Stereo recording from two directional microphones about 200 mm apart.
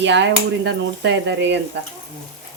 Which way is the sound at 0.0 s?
65° right (ahead or behind).